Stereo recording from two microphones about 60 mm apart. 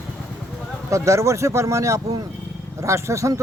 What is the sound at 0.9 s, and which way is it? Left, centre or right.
A man's voice, right.